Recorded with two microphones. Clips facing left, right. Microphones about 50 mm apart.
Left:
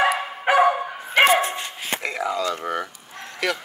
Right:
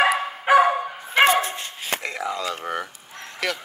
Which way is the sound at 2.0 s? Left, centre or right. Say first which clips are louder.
Left 5 dB; left.